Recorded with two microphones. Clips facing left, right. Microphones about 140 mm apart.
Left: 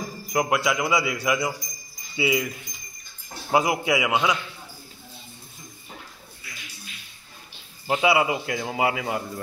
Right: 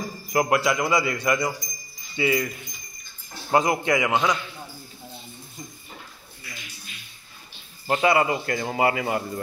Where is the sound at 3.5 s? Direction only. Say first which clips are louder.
Right 1 dB; 5° left (ahead or behind).